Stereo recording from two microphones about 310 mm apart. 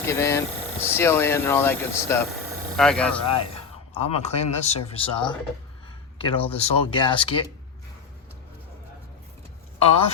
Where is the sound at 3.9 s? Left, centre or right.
Centre.